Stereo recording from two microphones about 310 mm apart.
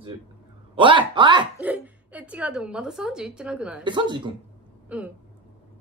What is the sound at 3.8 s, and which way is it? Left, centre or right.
Speech, centre.